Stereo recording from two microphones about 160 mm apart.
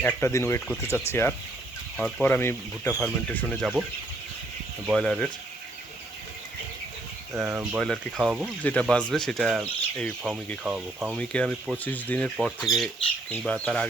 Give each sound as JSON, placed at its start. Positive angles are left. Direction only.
{"t": 0.0, "sound": "speech", "side_deg": 15}
{"t": 2.0, "sound": "speech", "side_deg": 0}
{"t": 2.2, "sound": "speech", "side_deg": 15}
{"t": 4.9, "sound": "speech", "side_deg": 5}
{"t": 7.3, "sound": "speech", "side_deg": -5}
{"t": 8.6, "sound": "speech", "side_deg": 5}
{"t": 11.2, "sound": "speech", "side_deg": 5}
{"t": 12.4, "sound": "speech", "side_deg": 0}